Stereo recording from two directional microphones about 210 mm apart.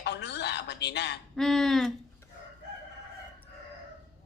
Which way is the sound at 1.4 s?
Centre (ahead or behind).